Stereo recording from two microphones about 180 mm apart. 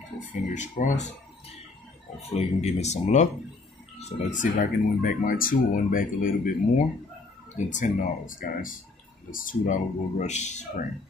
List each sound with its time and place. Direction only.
0.3 s speech: 45° left (ahead or behind)
2.3 s speech: 40° left (ahead or behind)
4.3 s speech: 45° left (ahead or behind)
7.5 s speech: 45° left (ahead or behind)